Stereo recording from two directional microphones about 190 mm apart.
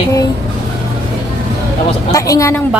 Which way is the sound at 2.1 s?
20° left (ahead or behind).